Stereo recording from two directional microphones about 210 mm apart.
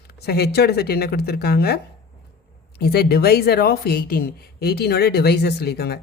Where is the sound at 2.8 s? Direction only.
50° left (ahead or behind).